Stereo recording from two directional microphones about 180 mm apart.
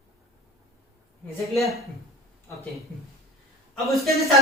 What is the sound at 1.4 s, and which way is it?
Speech, centre (ahead or behind).